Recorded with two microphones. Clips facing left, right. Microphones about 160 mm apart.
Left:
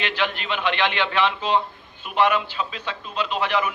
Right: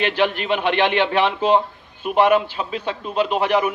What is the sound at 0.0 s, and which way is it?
Speech, 45° right (ahead or behind).